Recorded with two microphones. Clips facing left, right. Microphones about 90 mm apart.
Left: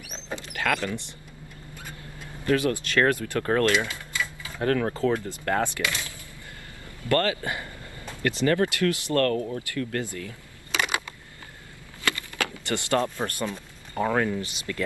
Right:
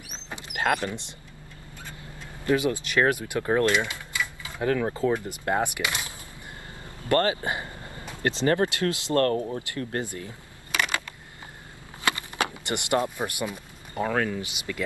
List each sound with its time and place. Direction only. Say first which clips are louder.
0.4 s mechanisms: right 2 dB; 20° right (ahead or behind)
2.4 s speech: even; 15° right (ahead or behind)
12.0 s a sound: right 2 dB; 20° right (ahead or behind)
14.0 s speech: left 2 dB; 15° left (ahead or behind)
14.4 s speech: left 1 dB; 15° right (ahead or behind)